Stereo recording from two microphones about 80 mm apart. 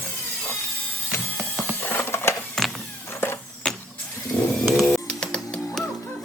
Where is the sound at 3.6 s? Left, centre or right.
Centre.